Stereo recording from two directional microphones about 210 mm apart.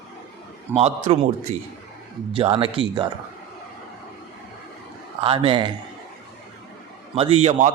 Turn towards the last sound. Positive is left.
turn(degrees=-35)  # may be behind; listen again after turning